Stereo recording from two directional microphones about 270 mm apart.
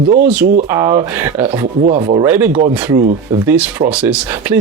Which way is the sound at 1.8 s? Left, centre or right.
Right.